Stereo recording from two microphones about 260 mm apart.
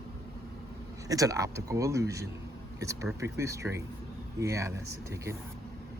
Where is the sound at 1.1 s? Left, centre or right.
Centre.